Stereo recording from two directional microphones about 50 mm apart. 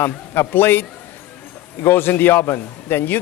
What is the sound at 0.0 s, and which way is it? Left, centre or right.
A man's voice, left.